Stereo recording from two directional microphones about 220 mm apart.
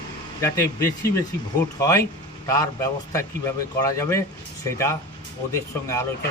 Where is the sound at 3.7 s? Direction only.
15° left (ahead or behind).